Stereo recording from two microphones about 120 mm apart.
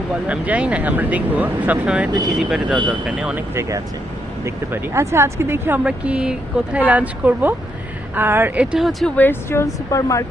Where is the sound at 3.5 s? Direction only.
25° right (ahead or behind).